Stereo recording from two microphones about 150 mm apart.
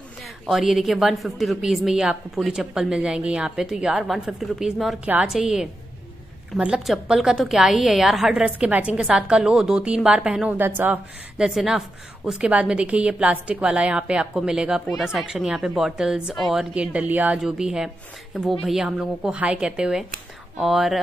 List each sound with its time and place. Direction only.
0.2 s a woman's voice: centre (ahead or behind)